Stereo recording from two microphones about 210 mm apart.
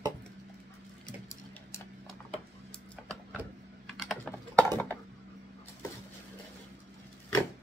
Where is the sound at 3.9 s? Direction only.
Centre (ahead or behind).